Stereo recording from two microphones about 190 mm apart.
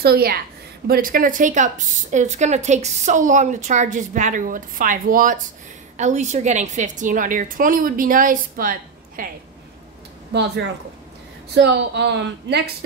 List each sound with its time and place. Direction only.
0.0 s a woman's voice: 55° right (ahead or behind)
11.5 s a woman's voice: 60° right (ahead or behind)